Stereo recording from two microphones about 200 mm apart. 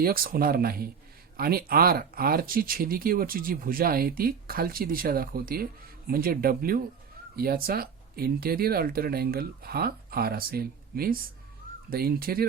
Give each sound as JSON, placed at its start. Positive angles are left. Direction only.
{"t": 0.0, "sound": "speech", "side_deg": -45}